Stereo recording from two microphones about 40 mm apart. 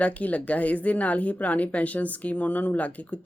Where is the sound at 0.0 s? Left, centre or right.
Left.